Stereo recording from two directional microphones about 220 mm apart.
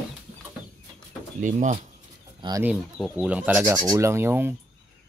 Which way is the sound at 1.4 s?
35° right (ahead or behind).